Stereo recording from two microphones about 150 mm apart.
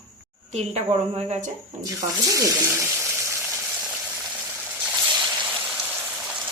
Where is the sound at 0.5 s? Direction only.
45° right (ahead or behind).